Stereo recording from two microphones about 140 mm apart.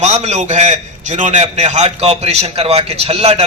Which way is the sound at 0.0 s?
50° right (ahead or behind).